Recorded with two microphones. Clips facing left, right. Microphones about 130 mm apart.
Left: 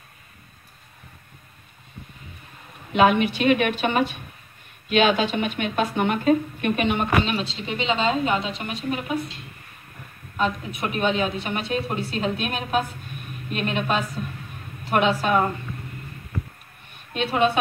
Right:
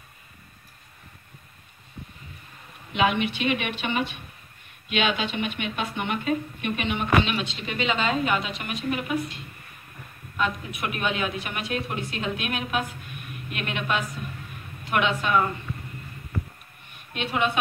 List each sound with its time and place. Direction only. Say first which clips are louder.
2.9 s a woman's voice: left 5 dB; 45° left (ahead or behind)
10.8 s a woman's voice: left 5 dB; 30° left (ahead or behind)
17.1 s a woman's voice: left 5 dB; 35° left (ahead or behind)